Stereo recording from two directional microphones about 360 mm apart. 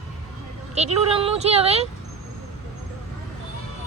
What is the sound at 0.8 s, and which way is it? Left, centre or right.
Speech, centre.